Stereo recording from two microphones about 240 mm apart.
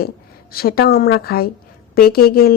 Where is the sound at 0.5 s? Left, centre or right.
Left.